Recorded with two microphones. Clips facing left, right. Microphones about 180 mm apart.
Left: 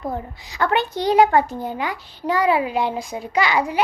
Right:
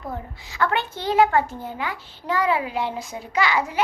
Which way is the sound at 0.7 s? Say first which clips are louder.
Left 5 dB; 15° left (ahead or behind).